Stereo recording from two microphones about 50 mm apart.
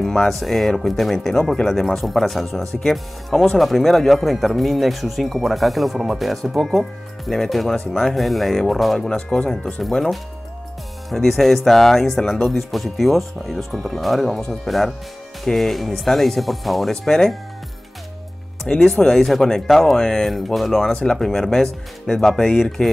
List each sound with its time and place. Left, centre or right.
0.0 s speech: centre
9.1 s speech: centre
18.8 s speech: centre
20.9 s speech: centre